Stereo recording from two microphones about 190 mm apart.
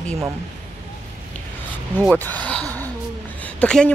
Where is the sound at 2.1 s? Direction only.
10° left (ahead or behind).